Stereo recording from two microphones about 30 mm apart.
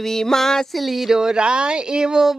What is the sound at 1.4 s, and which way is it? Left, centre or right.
Speech, right.